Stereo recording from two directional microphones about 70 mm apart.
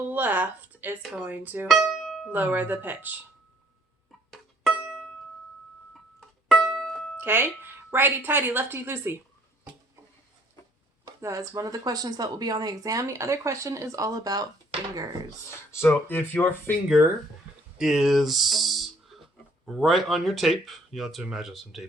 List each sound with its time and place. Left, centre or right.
0.1 s speech: right
1.6 s music: centre
2.3 s speech: right
5.9 s music: centre
7.2 s a woman's voice: right
11.2 s speech: right
15.4 s speech: left
15.9 s speech: left
17.7 s speech: centre